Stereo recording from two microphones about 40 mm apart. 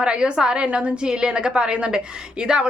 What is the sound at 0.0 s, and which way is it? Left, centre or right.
Speech, right.